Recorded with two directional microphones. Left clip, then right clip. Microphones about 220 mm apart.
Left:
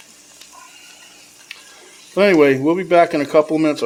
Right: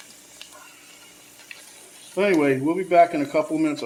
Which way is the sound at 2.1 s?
50° left (ahead or behind).